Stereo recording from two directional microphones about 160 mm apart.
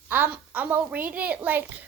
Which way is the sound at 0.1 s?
10° right (ahead or behind).